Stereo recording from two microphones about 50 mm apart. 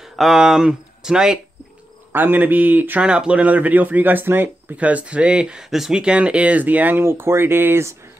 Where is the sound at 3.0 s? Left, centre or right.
Right.